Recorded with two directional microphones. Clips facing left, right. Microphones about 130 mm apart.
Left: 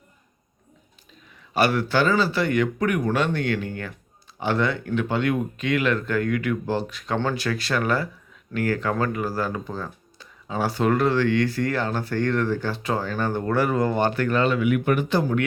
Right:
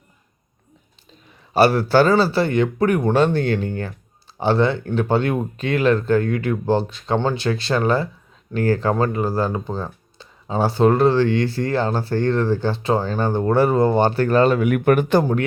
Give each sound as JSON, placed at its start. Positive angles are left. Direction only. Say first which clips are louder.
{"t": 1.5, "sound": "speech", "louder": "right 6 dB", "side_deg": -35}